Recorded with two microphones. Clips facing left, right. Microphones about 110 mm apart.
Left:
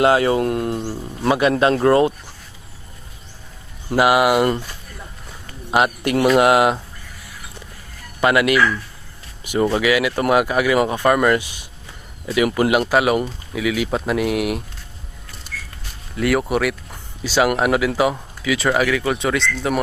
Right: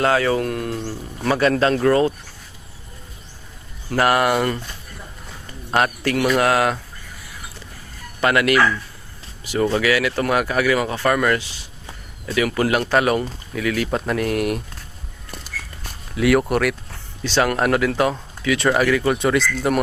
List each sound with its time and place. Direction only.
0.0 s speech: 25° left (ahead or behind)
3.8 s speech: 10° left (ahead or behind)
5.7 s speech: 15° left (ahead or behind)
8.2 s speech: 10° left (ahead or behind)
16.1 s speech: centre (ahead or behind)